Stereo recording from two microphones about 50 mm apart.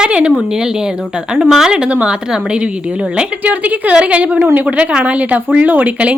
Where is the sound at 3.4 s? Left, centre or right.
Right.